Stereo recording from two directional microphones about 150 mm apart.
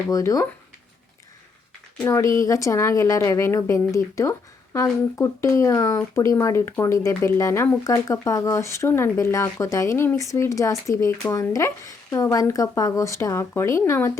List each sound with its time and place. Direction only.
0.1 s a woman's voice: 20° left (ahead or behind)
2.0 s a woman's voice: 20° left (ahead or behind)